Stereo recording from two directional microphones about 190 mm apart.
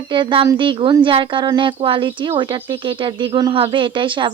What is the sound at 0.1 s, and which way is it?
Speech, 25° right (ahead or behind).